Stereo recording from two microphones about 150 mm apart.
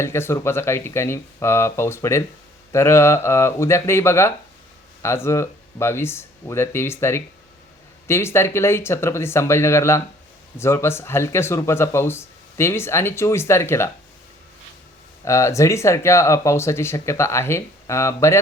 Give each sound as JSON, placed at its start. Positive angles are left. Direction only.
{"t": 0.0, "sound": "speech", "side_deg": 15}
{"t": 15.2, "sound": "speech", "side_deg": 20}